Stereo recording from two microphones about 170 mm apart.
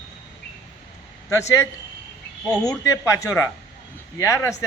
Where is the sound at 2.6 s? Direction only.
20° left (ahead or behind).